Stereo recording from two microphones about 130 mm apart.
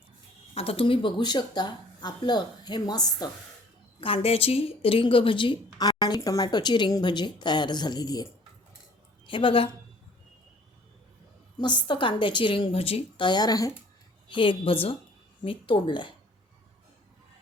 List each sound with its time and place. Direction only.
0.5 s speech: 50° left (ahead or behind); by 3.2 s 30° left (ahead or behind)
4.0 s speech: 50° left (ahead or behind); by 8.3 s 30° left (ahead or behind)
9.2 s a woman's voice: 40° left (ahead or behind)
11.6 s speech: 35° left (ahead or behind)
14.3 s a woman's voice: 40° left (ahead or behind)